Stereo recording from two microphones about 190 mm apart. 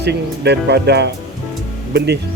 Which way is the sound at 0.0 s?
60° right (ahead or behind).